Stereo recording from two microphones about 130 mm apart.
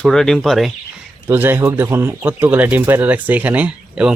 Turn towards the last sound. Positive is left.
turn(degrees=-10)  # may be behind; listen again after turning